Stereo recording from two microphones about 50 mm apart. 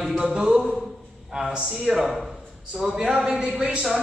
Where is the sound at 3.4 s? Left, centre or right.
Right.